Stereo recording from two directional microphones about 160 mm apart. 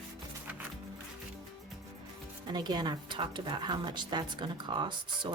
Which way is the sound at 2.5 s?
25° right (ahead or behind).